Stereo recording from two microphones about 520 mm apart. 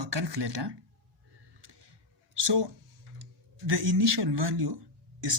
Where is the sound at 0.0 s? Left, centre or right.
Right.